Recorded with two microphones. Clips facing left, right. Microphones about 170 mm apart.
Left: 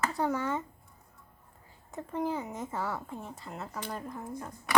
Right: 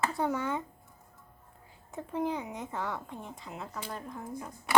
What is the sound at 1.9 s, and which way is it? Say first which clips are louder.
A woman's voice: even; centre (ahead or behind).